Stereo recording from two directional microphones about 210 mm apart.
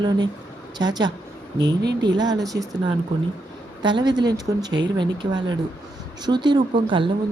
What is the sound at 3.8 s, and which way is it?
Speech, 20° right (ahead or behind).